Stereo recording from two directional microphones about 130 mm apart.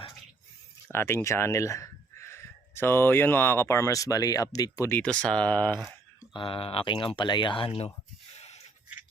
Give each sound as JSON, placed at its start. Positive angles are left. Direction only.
{"t": 0.9, "sound": "speech", "side_deg": 20}
{"t": 4.9, "sound": "speech", "side_deg": 10}
{"t": 6.1, "sound": "speech", "side_deg": 40}
{"t": 8.4, "sound": "a sound", "side_deg": 55}